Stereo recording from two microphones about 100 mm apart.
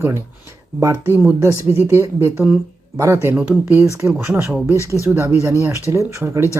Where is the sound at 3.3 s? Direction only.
15° right (ahead or behind).